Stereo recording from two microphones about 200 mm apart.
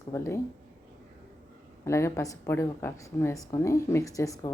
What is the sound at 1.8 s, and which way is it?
A woman's voice, 15° left (ahead or behind).